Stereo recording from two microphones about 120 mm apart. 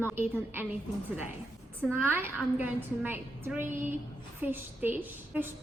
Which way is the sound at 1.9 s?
15° right (ahead or behind).